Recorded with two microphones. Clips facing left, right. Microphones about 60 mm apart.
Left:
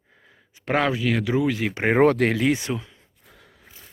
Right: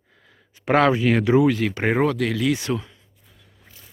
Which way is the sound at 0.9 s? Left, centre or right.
Right.